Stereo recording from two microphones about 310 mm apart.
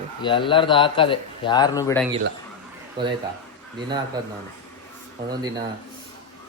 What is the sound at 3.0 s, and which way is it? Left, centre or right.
Speech, centre.